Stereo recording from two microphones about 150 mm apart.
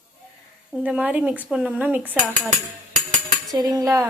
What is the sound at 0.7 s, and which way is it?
Speech, 5° right (ahead or behind).